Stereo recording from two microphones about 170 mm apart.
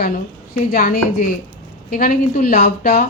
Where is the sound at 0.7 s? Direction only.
55° left (ahead or behind).